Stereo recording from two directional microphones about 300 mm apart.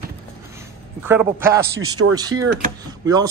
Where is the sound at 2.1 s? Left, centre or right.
Centre.